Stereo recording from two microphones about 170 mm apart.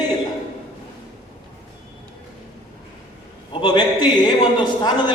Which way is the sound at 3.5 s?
25° left (ahead or behind).